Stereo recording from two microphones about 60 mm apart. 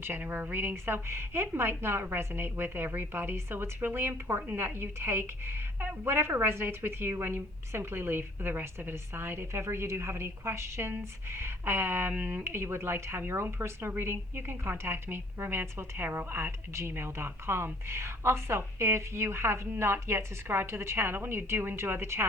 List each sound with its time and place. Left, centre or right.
0.0 s a woman's voice: right
12.1 s speech: right
12.5 s a woman's voice: right